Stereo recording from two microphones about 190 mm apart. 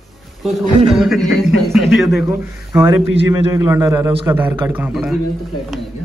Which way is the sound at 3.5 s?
20° right (ahead or behind).